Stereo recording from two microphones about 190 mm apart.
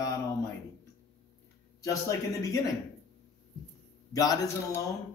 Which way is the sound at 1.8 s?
15° left (ahead or behind).